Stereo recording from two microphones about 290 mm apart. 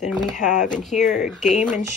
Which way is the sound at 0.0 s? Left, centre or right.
Centre.